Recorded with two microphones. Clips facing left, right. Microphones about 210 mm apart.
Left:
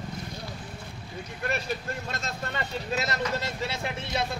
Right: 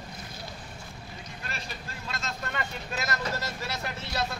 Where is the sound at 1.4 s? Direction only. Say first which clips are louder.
Left 11 dB; 60° left (ahead or behind).